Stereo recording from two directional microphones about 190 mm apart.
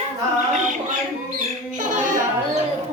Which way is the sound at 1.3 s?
40° right (ahead or behind).